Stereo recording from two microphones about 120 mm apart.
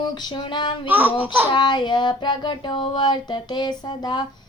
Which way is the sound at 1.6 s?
40° left (ahead or behind).